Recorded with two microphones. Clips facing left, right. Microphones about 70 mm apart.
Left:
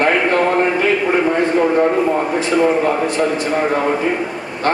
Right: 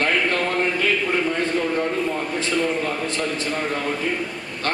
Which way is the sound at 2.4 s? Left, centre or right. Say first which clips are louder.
Left 7 dB; centre.